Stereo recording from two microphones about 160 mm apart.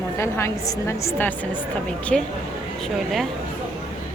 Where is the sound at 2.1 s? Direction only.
5° left (ahead or behind).